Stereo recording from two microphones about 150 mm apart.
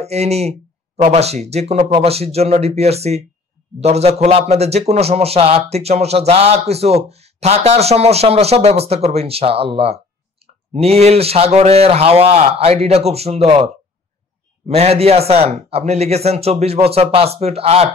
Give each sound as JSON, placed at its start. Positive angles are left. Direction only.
{"t": 0.0, "sound": "speech", "side_deg": -45}
{"t": 14.7, "sound": "speech", "side_deg": -45}